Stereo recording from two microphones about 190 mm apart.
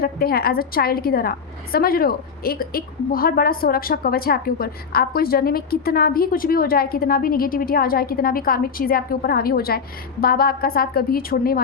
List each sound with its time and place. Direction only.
0.0 s a woman's voice: 50° left (ahead or behind)